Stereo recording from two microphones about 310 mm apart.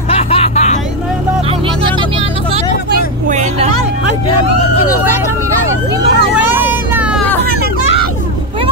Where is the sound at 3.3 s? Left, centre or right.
Right.